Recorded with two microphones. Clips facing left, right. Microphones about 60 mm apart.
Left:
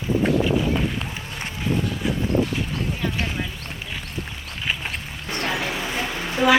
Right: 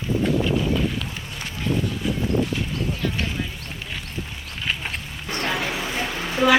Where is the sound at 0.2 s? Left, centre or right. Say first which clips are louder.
Left 1 dB; left.